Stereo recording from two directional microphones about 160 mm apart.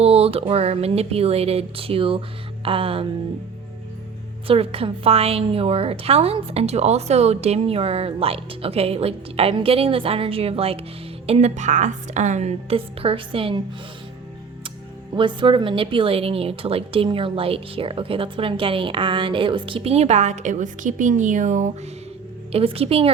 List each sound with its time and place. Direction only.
0.0 s speech: 40° right (ahead or behind)
4.4 s a woman's voice: 35° right (ahead or behind)
15.1 s speech: 30° right (ahead or behind); by 21.7 s 50° right (ahead or behind)
22.5 s speech: 40° right (ahead or behind)